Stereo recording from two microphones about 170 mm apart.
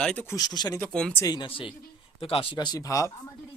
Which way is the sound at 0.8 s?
5° left (ahead or behind).